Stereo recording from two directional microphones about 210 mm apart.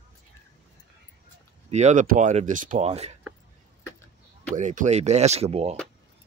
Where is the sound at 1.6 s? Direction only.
30° right (ahead or behind).